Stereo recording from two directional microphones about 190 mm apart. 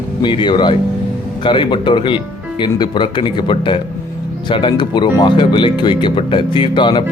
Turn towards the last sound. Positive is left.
turn(degrees=25)  # may be behind; listen again after turning